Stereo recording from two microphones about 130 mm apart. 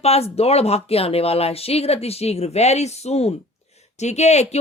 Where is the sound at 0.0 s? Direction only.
50° left (ahead or behind).